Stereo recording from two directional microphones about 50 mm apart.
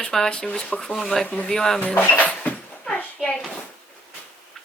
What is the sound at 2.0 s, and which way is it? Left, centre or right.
Speech, left.